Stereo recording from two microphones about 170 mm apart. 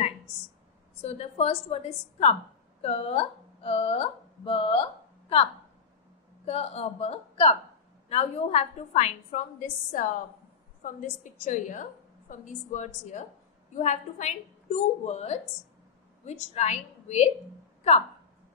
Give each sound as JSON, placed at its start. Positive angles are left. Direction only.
{"t": 1.0, "sound": "a woman's voice", "side_deg": 35}
{"t": 6.4, "sound": "a woman's voice", "side_deg": 40}